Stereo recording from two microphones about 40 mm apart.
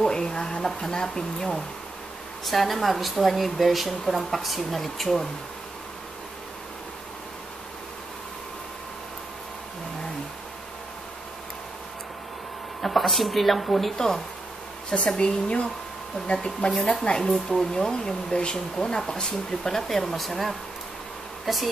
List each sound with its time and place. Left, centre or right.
0.0 s speech: centre
2.4 s a woman's voice: centre
12.8 s a woman's voice: centre
15.0 s speech: left
16.9 s speech: left
17.3 s a woman's voice: centre